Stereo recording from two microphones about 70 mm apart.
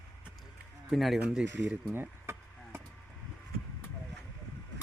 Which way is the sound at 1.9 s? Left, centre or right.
Right.